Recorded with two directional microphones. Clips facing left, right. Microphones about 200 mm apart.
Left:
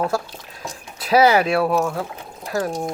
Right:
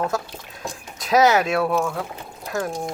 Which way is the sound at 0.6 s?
5° left (ahead or behind).